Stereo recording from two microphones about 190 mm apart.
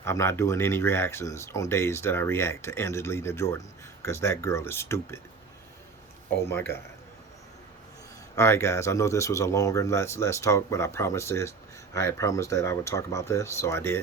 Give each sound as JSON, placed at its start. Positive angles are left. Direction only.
{"t": 0.0, "sound": "speech", "side_deg": 15}
{"t": 6.3, "sound": "speech", "side_deg": 10}
{"t": 8.4, "sound": "speech", "side_deg": 15}